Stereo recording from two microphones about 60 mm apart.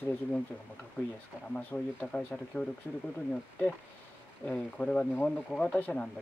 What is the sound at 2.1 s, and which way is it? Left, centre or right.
Speech, centre.